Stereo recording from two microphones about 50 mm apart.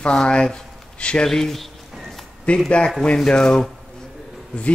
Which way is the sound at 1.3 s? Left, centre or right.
Centre.